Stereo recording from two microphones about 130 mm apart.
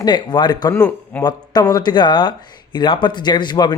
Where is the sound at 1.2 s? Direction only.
30° left (ahead or behind).